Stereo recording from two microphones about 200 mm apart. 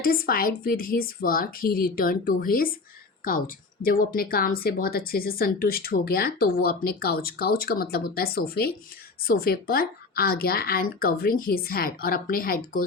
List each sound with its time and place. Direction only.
0.0 s speech: 45° left (ahead or behind)